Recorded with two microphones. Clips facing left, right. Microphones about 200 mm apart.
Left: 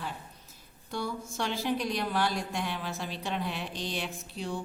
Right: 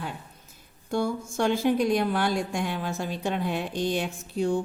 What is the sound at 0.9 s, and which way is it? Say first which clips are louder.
A woman's voice: right 8 dB; 50° right (ahead or behind).